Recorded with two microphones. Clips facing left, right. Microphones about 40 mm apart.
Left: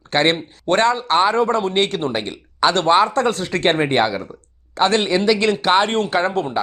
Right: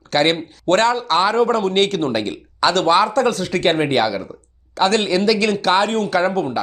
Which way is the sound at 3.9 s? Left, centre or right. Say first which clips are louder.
Even; left.